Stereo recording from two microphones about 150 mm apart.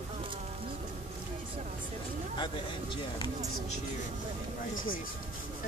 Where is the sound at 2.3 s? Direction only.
35° left (ahead or behind).